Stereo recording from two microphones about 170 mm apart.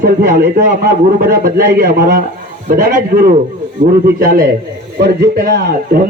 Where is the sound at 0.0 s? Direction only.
60° right (ahead or behind).